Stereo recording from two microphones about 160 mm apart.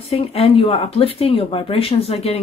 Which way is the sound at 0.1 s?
40° left (ahead or behind).